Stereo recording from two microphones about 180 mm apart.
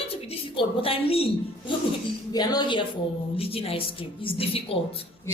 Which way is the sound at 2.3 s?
20° left (ahead or behind).